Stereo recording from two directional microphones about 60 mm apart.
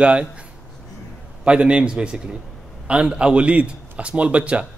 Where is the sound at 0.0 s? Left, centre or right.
Centre.